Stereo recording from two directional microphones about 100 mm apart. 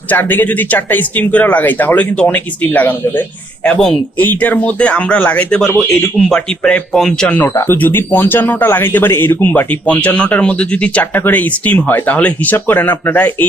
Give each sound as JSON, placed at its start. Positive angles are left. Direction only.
{"t": 0.1, "sound": "speech", "side_deg": 20}
{"t": 7.4, "sound": "speech", "side_deg": 20}